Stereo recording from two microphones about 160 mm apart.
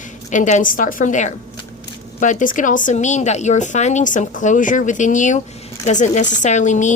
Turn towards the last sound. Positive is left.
turn(degrees=50)  # may be behind; listen again after turning